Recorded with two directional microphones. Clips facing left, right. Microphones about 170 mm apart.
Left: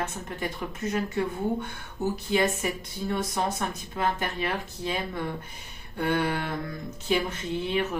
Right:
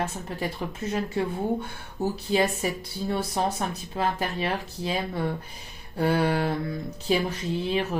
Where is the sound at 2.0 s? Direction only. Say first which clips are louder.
Right 1 dB; 30° right (ahead or behind).